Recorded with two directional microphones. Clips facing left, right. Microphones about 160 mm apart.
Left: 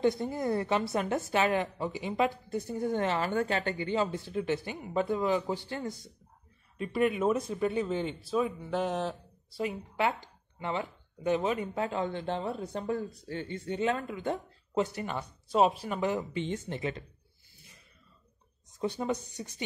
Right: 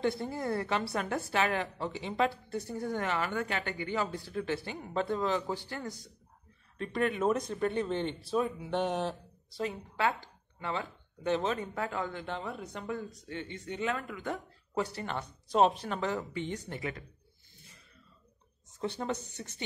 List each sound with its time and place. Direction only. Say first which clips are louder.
0.0 s a woman's voice: left 4 dB; 15° left (ahead or behind)
3.0 s a woman's voice: left 3 dB; 30° left (ahead or behind)
6.8 s speech: left 2 dB; 10° left (ahead or behind)
9.6 s a woman's voice: left 2 dB; 15° left (ahead or behind)
18.8 s a woman's voice: left 3 dB; 15° left (ahead or behind)